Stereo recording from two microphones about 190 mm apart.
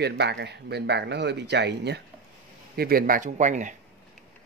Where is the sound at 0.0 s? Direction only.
60° right (ahead or behind).